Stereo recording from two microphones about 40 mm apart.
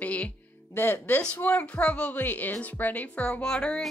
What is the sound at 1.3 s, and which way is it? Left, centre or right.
Speech, left.